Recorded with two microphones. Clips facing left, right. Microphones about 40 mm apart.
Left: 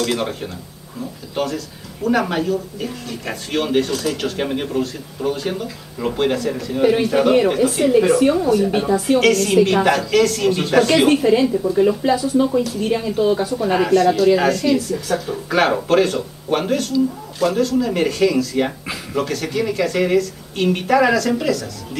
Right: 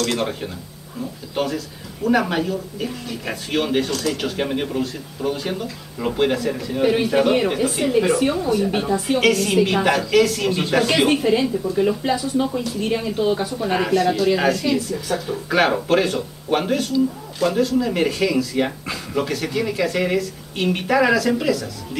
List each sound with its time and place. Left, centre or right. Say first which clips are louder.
0.0 s speech: left 1 dB; centre